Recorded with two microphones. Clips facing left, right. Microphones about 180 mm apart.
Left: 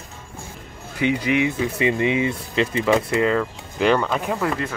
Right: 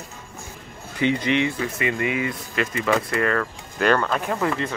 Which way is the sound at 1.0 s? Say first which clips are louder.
Left 1 dB; 5° left (ahead or behind).